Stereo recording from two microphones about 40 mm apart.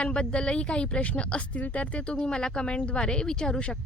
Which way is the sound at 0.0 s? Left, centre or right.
Left.